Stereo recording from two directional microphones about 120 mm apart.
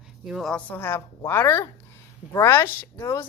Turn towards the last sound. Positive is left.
turn(degrees=20)  # may be behind; listen again after turning